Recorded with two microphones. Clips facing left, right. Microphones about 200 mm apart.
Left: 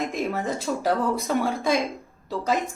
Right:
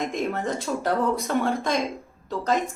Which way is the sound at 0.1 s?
5° left (ahead or behind).